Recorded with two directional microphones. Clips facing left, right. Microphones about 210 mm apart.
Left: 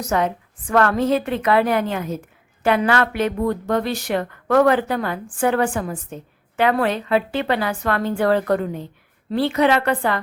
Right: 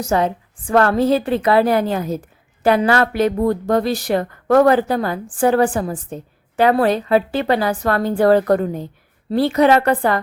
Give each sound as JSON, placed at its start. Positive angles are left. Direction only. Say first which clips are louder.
{"t": 0.0, "sound": "speech", "louder": "right 3 dB", "side_deg": -30}